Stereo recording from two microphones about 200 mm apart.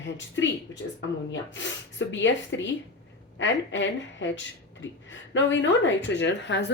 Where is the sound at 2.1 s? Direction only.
65° left (ahead or behind).